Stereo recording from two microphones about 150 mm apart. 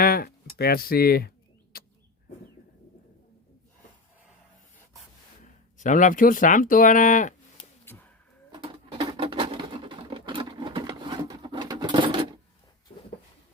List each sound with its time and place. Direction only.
0.0 s a sound: 85° left
5.7 s speech: 55° left (ahead or behind)
7.9 s whip: 10° left (ahead or behind)
8.5 s patter: 35° right (ahead or behind)